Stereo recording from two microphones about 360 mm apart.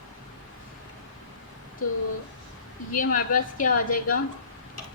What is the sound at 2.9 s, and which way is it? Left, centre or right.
A woman's voice, left.